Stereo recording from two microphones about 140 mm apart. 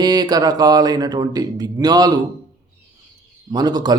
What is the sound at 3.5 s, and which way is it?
Speech, 30° right (ahead or behind).